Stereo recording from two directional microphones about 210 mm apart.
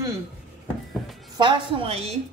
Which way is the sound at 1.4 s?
25° right (ahead or behind).